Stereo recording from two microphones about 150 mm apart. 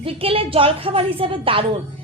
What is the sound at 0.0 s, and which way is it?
A woman's voice, 40° right (ahead or behind).